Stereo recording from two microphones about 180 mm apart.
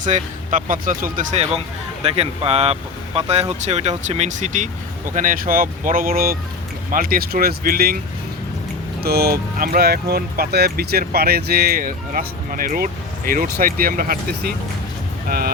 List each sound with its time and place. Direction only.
0.0 s speech: 45° right (ahead or behind)
9.0 s speech: 60° right (ahead or behind)